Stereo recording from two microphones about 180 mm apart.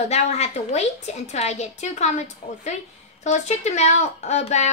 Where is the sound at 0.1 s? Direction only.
35° left (ahead or behind).